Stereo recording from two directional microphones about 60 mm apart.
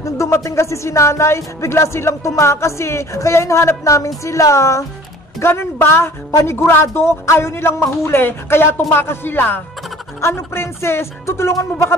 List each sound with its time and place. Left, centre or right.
0.0 s speech: left
5.4 s speech: left